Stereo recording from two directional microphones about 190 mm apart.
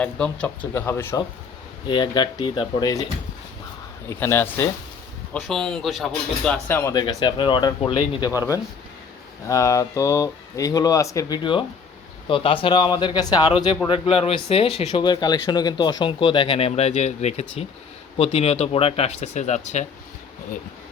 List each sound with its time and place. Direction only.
0.0 s speech: 5° left (ahead or behind)
1.9 s speech: 25° left (ahead or behind)
4.1 s speech: 10° left (ahead or behind)
5.3 s speech: centre (ahead or behind); by 19.8 s 40° left (ahead or behind)